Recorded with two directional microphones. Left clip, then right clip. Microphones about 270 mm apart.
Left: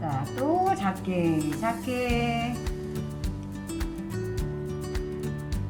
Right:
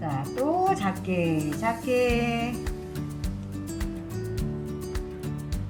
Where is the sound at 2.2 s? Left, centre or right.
Right.